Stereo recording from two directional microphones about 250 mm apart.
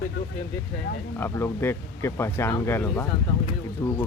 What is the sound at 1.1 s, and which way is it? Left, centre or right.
Speech, centre.